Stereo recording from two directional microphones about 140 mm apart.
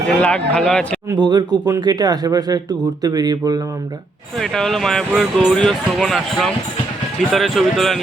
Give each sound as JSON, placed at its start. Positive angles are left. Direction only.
{"t": 0.2, "sound": "speech", "side_deg": 10}
{"t": 1.1, "sound": "speech", "side_deg": -30}
{"t": 4.4, "sound": "speech", "side_deg": 5}